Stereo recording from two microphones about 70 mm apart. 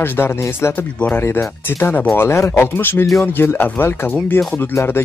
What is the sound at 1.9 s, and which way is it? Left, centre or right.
Speech, left.